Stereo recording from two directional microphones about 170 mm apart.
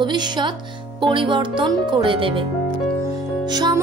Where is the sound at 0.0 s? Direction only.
25° right (ahead or behind).